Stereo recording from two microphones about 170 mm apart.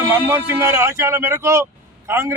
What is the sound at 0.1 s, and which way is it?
A man's voice, 15° right (ahead or behind).